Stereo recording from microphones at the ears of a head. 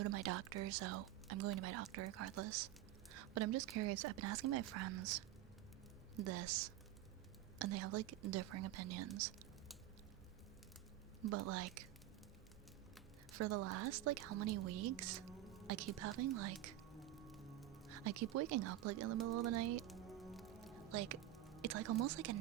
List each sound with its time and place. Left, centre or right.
0.0 s speech: right
11.2 s speech: right
13.3 s speech: right
17.9 s speech: right
19.8 s music: centre
21.6 s speech: right